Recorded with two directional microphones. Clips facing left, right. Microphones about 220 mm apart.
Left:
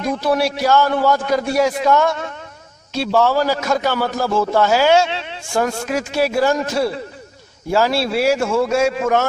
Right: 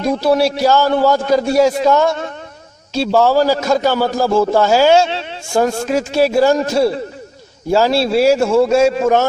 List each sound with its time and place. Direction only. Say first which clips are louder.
0.0 s a man's voice: right 4 dB; 30° right (ahead or behind)